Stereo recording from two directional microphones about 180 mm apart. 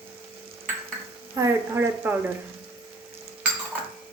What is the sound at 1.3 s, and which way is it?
Speech, 15° right (ahead or behind).